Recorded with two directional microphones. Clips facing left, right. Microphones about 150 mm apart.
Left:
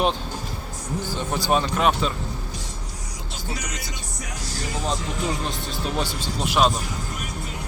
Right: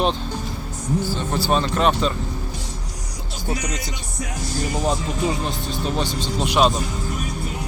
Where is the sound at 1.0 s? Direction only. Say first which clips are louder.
Right 2 dB; 15° left (ahead or behind).